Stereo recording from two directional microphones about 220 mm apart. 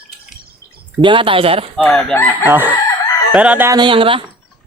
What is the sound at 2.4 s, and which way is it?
Speech, 10° right (ahead or behind).